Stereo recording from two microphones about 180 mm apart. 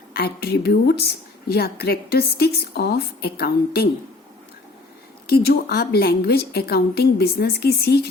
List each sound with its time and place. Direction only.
0.1 s a woman's voice: 60° left (ahead or behind)
5.2 s a woman's voice: 60° left (ahead or behind)